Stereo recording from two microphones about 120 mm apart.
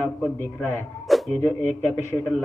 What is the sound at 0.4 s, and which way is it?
Speech, 15° left (ahead or behind).